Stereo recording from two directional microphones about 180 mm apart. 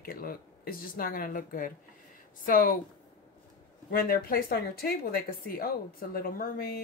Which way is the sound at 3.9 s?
55° left (ahead or behind).